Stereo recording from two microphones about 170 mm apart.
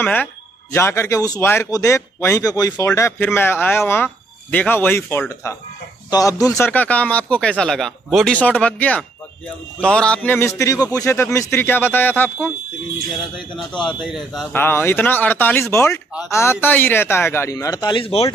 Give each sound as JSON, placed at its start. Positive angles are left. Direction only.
{"t": 0.0, "sound": "speech", "side_deg": 10}
{"t": 13.7, "sound": "speech", "side_deg": 25}
{"t": 14.1, "sound": "speech", "side_deg": 0}
{"t": 14.5, "sound": "speech", "side_deg": 10}